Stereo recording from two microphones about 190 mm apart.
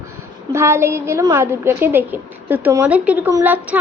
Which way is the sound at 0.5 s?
15° right (ahead or behind).